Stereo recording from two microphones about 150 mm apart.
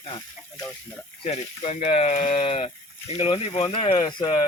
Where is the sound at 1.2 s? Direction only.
45° left (ahead or behind).